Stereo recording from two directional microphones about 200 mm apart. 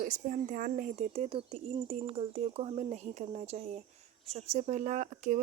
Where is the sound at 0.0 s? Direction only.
40° right (ahead or behind).